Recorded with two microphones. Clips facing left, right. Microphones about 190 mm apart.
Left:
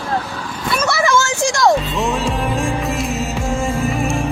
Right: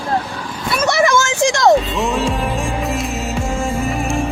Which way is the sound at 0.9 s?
15° right (ahead or behind).